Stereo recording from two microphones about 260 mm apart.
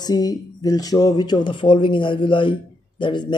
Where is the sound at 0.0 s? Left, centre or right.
Centre.